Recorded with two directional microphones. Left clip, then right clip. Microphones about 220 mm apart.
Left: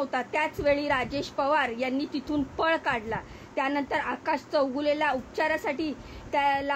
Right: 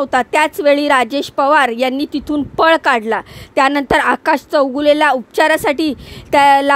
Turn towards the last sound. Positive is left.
turn(degrees=-50)  # may be behind; listen again after turning